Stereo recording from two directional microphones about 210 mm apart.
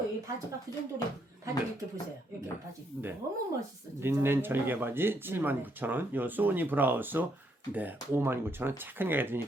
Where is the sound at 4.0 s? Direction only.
10° right (ahead or behind).